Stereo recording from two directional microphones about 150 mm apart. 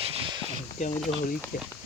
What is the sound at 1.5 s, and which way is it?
Speech, 70° left (ahead or behind).